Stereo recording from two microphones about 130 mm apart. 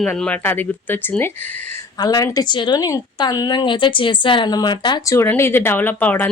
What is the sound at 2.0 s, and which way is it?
Speech, 30° left (ahead or behind).